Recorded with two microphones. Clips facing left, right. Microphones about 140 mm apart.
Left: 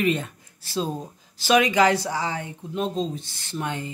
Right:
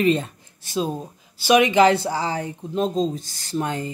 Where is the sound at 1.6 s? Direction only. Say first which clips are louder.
Right 4 dB; 25° right (ahead or behind).